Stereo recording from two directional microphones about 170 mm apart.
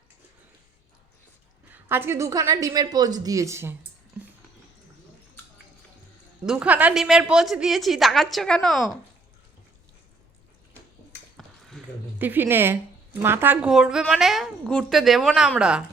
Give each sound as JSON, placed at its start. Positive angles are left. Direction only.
{"t": 1.7, "sound": "a woman's voice", "side_deg": -15}
{"t": 6.4, "sound": "a woman's voice", "side_deg": -5}
{"t": 11.8, "sound": "a sound", "side_deg": 5}
{"t": 12.2, "sound": "a woman's voice", "side_deg": -10}